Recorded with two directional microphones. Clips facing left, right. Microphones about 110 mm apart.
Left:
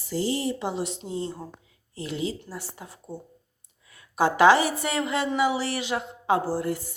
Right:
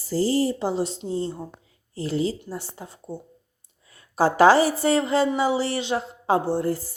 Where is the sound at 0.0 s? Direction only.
35° right (ahead or behind).